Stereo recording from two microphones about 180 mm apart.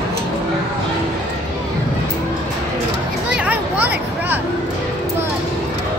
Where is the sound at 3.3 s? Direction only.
10° right (ahead or behind).